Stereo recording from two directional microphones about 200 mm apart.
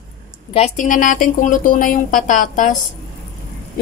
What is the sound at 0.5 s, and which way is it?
A woman's voice, 35° left (ahead or behind).